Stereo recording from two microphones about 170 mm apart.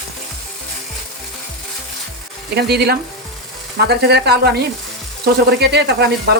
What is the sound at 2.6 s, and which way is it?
Speech, 75° right (ahead or behind).